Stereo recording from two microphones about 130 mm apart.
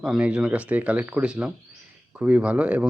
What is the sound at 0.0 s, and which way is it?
Speech, 5° right (ahead or behind).